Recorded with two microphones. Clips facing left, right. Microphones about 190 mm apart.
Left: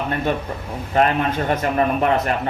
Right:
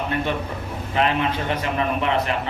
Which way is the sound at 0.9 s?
45° left (ahead or behind).